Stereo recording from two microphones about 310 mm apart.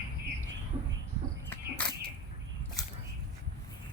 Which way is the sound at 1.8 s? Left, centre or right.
Centre.